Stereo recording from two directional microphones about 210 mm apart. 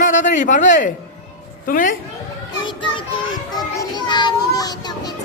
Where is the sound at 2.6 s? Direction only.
25° left (ahead or behind).